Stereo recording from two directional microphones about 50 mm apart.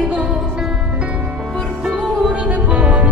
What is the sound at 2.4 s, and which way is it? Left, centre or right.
Music, right.